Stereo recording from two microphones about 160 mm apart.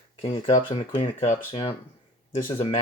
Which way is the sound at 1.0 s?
50° left (ahead or behind).